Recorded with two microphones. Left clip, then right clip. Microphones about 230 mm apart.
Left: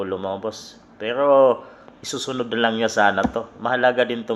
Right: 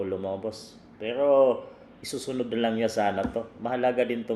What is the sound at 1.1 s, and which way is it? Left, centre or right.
Speech, left.